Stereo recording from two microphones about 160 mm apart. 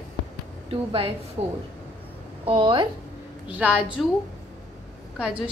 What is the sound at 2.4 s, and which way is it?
Speech, 30° right (ahead or behind).